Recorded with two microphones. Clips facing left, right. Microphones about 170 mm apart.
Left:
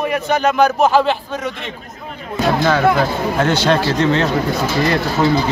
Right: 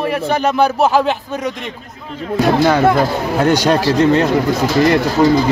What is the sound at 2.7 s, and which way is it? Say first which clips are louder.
Speech: right 2 dB; 20° right (ahead or behind).